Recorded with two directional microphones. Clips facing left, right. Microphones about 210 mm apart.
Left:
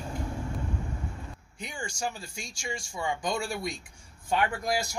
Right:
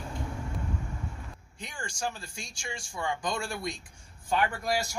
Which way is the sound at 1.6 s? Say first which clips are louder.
Left 1 dB; 10° left (ahead or behind).